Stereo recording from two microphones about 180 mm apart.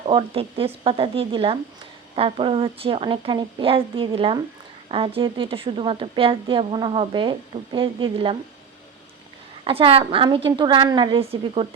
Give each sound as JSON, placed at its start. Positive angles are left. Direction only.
{"t": 0.0, "sound": "a woman's voice", "side_deg": -30}
{"t": 9.6, "sound": "a woman's voice", "side_deg": -30}